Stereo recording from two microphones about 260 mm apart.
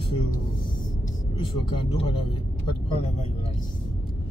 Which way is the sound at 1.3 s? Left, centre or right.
Centre.